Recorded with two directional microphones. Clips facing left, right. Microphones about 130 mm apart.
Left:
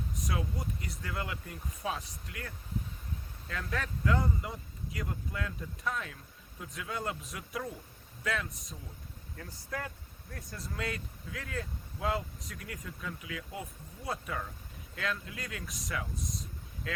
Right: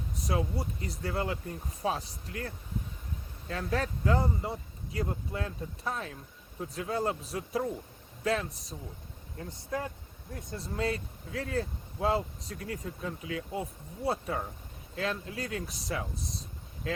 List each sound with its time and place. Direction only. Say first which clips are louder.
0.2 s speech: right 6 dB; 30° right (ahead or behind)
3.5 s speech: right 5 dB; 30° right (ahead or behind)